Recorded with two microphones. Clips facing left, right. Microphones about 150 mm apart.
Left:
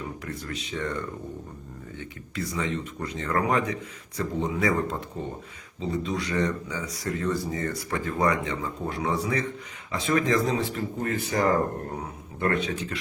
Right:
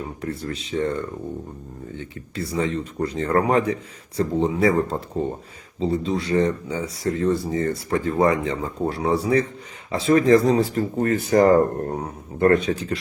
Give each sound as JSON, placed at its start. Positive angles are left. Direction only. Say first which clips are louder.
{"t": 0.2, "sound": "speech", "louder": "right 6 dB", "side_deg": -30}